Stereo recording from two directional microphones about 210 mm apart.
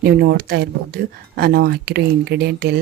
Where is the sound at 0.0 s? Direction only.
45° right (ahead or behind).